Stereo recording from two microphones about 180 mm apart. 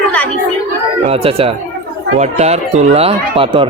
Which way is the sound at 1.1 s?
30° right (ahead or behind).